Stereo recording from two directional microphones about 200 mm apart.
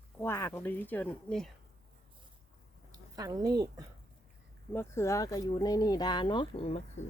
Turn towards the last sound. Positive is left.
turn(degrees=30)  # may be behind; listen again after turning